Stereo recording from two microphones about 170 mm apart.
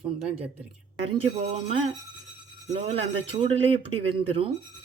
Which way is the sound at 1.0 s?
35° right (ahead or behind).